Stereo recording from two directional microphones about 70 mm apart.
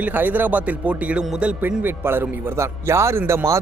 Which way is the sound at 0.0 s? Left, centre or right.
Right.